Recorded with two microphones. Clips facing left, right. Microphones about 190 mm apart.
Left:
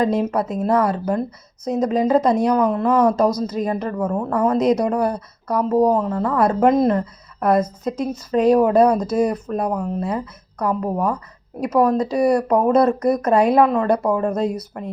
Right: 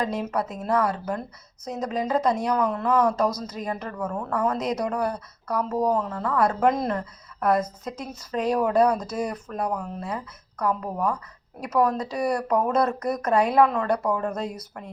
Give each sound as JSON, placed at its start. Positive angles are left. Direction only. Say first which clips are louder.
{"t": 0.0, "sound": "speech", "louder": "left 7 dB", "side_deg": 25}